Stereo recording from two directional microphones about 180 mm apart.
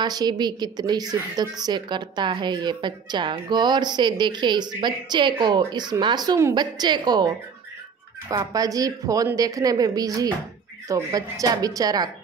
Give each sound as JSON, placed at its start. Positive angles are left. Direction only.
{"t": 0.0, "sound": "a woman's voice", "side_deg": -20}